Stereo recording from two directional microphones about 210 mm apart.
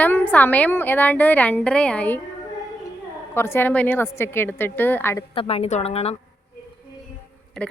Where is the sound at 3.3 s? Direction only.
10° left (ahead or behind).